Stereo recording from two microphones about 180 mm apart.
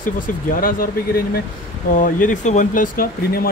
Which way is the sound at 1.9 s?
50° left (ahead or behind).